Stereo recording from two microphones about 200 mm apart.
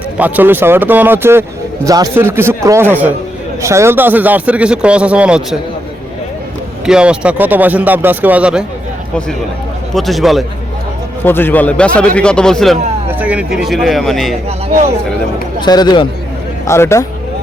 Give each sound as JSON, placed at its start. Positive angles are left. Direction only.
{"t": 0.2, "sound": "a man's voice", "side_deg": -10}
{"t": 6.8, "sound": "a man's voice", "side_deg": -5}
{"t": 9.9, "sound": "a man's voice", "side_deg": 0}
{"t": 11.2, "sound": "a man's voice", "side_deg": 10}
{"t": 15.6, "sound": "a man's voice", "side_deg": 20}